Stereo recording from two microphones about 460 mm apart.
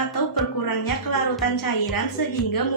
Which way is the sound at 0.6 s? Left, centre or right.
Left.